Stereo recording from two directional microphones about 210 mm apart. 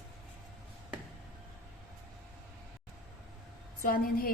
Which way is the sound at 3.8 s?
45° left (ahead or behind).